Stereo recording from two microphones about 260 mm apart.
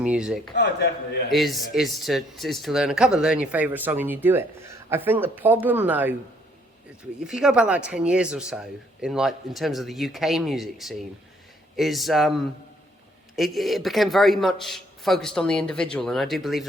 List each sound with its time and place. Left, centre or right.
0.0 s speech: centre
0.5 s a man's voice: left
1.3 s speech: centre
7.3 s speech: centre
13.3 s speech: centre